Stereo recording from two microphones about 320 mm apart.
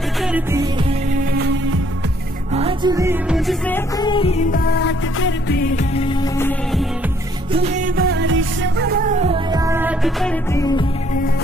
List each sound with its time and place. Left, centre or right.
0.2 s music: centre
1.3 s music: right
2.5 s music: centre; by 5.7 s left
5.9 s music: centre
7.5 s music: right; by 10.9 s centre